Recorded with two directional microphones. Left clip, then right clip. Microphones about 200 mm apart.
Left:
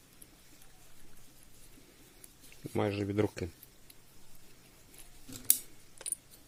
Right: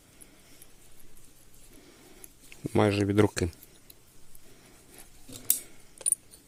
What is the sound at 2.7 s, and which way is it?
Speech, 50° right (ahead or behind).